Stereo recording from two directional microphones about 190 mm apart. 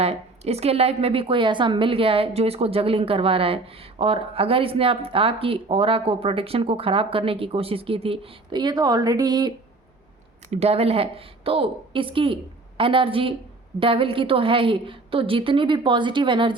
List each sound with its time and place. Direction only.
0.0 s a woman's voice: 30° right (ahead or behind)
10.5 s a woman's voice: 35° right (ahead or behind)